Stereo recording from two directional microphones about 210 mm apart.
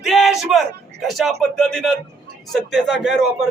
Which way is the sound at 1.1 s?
Centre (ahead or behind).